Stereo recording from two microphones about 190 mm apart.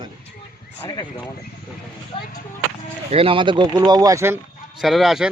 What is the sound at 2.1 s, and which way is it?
Speech, 25° left (ahead or behind).